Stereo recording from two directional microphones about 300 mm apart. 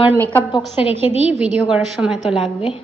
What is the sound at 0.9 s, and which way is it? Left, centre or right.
Speech, right.